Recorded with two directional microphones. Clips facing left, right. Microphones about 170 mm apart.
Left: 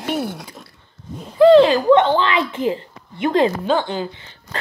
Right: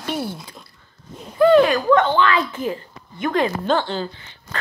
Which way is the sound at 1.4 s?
25° left (ahead or behind).